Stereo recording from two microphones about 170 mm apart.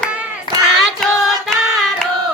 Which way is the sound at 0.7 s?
Centre (ahead or behind).